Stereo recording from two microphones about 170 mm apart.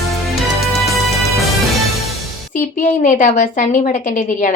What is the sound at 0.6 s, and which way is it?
Music, centre (ahead or behind).